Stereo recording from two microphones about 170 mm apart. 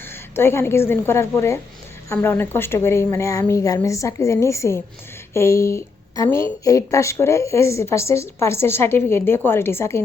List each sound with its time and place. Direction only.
0.0 s a woman's voice: 15° left (ahead or behind)